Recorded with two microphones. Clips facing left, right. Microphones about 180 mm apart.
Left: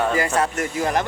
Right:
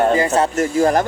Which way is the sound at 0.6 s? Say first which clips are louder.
Right 7 dB; 40° right (ahead or behind).